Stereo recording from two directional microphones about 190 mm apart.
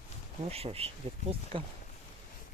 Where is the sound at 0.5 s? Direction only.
30° right (ahead or behind).